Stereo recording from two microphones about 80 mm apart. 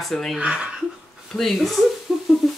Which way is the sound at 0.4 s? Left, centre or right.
Centre.